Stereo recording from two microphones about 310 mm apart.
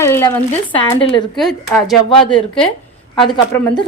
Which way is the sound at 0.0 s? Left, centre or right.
Centre.